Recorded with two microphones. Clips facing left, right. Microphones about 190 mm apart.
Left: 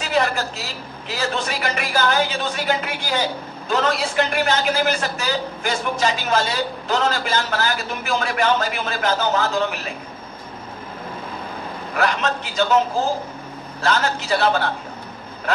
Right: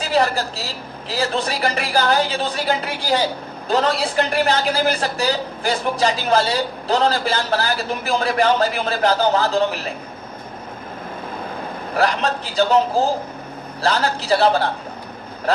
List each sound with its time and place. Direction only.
0.0 s a man's voice: 35° right (ahead or behind)
11.9 s a man's voice: 35° right (ahead or behind)
13.7 s a man's voice: 35° right (ahead or behind)